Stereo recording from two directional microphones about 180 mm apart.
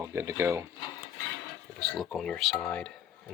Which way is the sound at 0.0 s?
15° right (ahead or behind).